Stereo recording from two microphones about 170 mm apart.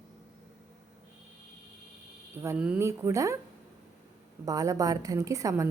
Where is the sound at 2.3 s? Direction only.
15° right (ahead or behind).